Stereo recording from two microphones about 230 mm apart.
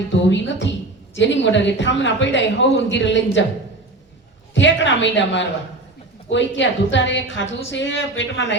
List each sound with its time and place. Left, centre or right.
0.1 s a woman's voice: left
4.5 s a woman's voice: left